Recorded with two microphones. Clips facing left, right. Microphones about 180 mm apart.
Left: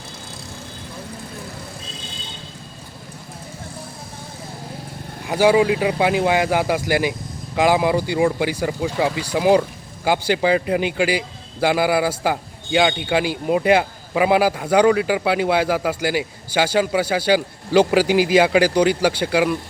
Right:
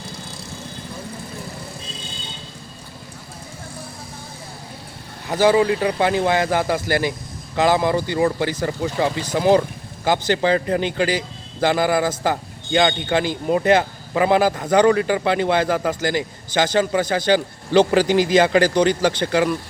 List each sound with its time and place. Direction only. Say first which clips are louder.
5.3 s a man's voice: left 1 dB; 10° left (ahead or behind)